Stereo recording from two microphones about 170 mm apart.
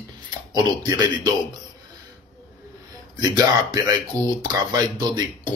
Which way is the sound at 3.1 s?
25° right (ahead or behind).